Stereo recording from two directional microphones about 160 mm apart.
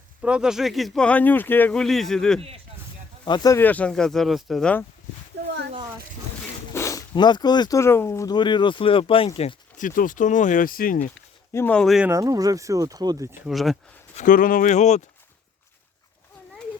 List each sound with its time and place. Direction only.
0.2 s speech: 5° right (ahead or behind)
3.2 s speech: 25° left (ahead or behind); by 4.9 s 5° left (ahead or behind)
6.7 s speech: 20° left (ahead or behind); by 9.6 s 35° left (ahead or behind)
9.7 s speech: 55° left (ahead or behind)
11.5 s speech: 10° left (ahead or behind)
12.0 s speech: 20° right (ahead or behind)
13.5 s speech: centre (ahead or behind)
14.2 s speech: 60° left (ahead or behind)